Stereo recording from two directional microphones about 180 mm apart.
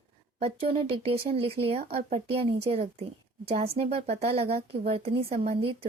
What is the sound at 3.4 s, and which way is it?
Speech, 35° right (ahead or behind).